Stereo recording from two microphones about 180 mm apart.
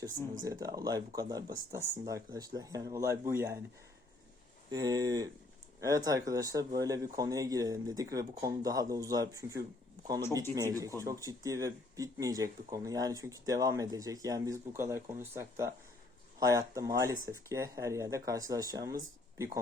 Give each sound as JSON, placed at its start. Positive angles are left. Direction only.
{"t": 0.0, "sound": "speech", "side_deg": -20}
{"t": 4.7, "sound": "speech", "side_deg": -20}